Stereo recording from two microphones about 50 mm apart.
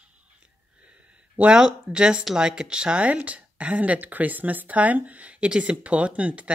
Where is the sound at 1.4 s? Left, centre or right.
Centre.